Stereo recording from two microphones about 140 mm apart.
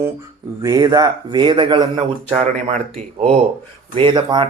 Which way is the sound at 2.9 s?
50° right (ahead or behind).